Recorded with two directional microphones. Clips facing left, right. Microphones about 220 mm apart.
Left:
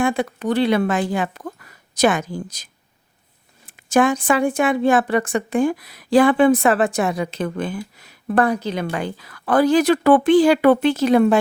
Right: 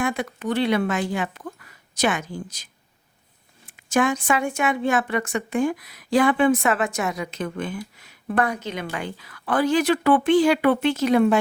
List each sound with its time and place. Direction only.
0.0 s speech: 30° left (ahead or behind)
3.8 s a woman's voice: 35° left (ahead or behind)